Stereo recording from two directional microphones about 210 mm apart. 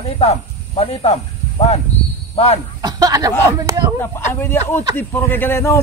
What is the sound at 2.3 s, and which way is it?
Speech, 30° left (ahead or behind).